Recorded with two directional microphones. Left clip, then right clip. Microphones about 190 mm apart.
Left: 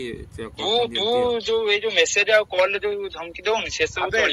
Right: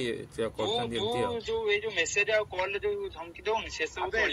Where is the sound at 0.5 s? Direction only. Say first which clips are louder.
Left 12 dB; 40° left (ahead or behind).